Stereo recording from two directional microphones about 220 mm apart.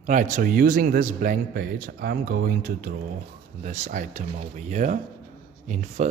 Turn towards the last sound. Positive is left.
turn(degrees=-35)  # may be behind; listen again after turning